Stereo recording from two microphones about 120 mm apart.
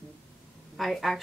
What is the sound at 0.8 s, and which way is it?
Speech, centre (ahead or behind).